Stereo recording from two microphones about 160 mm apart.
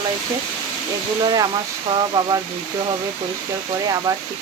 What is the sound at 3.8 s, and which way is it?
Speech, 25° right (ahead or behind).